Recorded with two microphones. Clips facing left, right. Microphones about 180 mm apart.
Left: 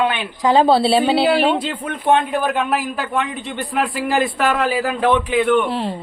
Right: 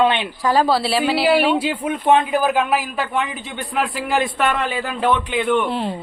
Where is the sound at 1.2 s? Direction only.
Centre (ahead or behind).